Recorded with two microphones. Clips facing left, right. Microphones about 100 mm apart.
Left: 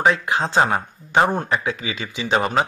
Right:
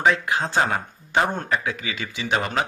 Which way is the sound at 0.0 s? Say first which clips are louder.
Left 2 dB; 20° left (ahead or behind).